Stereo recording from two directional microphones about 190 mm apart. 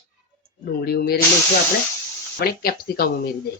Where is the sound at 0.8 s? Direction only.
55° left (ahead or behind).